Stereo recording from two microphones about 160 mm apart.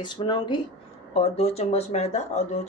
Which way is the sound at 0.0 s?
30° left (ahead or behind).